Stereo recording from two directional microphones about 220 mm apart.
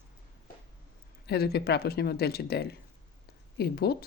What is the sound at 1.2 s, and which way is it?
Speech, 45° left (ahead or behind).